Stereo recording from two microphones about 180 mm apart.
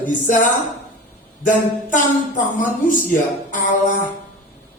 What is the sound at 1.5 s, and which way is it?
Music, 45° left (ahead or behind).